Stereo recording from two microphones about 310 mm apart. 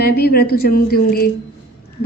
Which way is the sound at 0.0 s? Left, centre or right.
Left.